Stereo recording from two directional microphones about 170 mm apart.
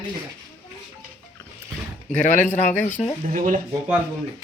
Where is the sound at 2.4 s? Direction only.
10° left (ahead or behind).